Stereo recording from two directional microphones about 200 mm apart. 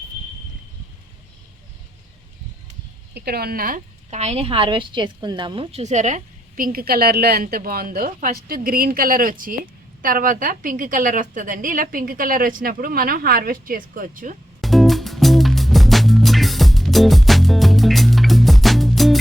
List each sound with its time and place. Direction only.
3.2 s a woman's voice: 50° right (ahead or behind)
14.6 s music: centre (ahead or behind)